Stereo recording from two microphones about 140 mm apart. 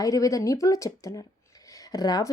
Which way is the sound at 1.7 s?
25° left (ahead or behind).